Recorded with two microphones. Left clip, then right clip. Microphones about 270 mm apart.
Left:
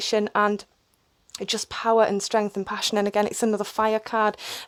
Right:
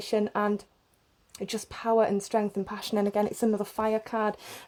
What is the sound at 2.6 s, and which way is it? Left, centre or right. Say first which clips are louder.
Speech: left 5 dB; left.